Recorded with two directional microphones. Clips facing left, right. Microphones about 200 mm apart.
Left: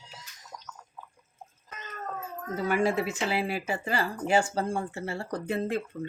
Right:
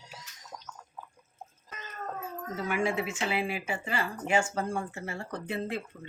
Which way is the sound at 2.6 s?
35° left (ahead or behind).